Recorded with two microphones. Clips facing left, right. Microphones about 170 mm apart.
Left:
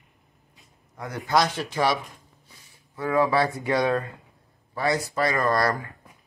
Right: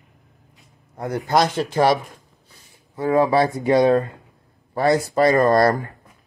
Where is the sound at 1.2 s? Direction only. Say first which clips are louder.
Right 3 dB; 45° right (ahead or behind).